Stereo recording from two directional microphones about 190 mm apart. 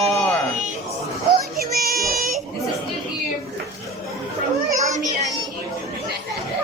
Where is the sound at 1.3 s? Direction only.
50° right (ahead or behind).